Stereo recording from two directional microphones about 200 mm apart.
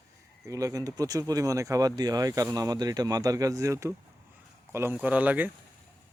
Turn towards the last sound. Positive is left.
turn(degrees=-10)  # may be behind; listen again after turning